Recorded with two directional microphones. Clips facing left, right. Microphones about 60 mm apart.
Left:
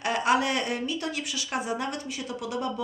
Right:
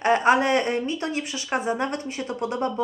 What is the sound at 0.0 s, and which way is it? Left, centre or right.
Speech, right.